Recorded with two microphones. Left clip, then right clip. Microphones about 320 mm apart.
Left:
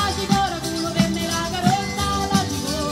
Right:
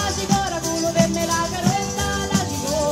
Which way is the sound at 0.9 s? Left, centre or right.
Centre.